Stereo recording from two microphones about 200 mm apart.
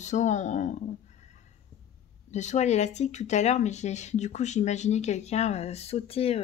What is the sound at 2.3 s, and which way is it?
Speech, 35° left (ahead or behind).